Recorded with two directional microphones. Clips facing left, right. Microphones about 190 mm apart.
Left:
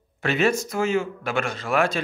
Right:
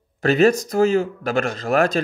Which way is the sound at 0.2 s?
40° right (ahead or behind).